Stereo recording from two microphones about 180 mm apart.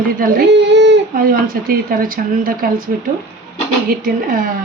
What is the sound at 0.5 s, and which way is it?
Baby cry, 75° right (ahead or behind).